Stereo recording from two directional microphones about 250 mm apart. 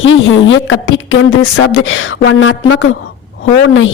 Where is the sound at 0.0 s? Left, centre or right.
Left.